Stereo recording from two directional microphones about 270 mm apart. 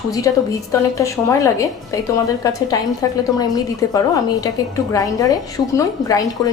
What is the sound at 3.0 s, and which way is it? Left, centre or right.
A woman's voice, centre.